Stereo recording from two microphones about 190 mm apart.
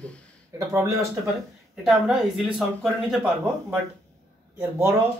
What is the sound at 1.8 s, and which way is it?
Speech, centre (ahead or behind).